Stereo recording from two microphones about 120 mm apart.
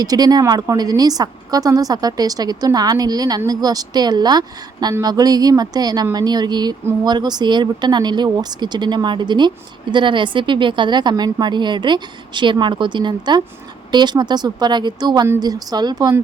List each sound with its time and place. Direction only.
0.0 s a woman's voice: 35° right (ahead or behind)